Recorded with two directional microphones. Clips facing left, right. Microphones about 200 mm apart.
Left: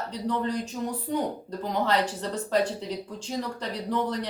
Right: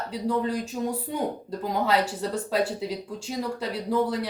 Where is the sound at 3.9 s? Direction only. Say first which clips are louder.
Right 3 dB; 5° right (ahead or behind).